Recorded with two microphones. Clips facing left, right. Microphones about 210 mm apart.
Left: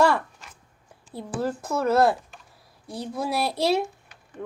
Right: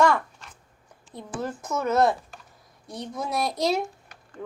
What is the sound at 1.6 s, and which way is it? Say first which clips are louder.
Speech: left 2 dB; 30° left (ahead or behind).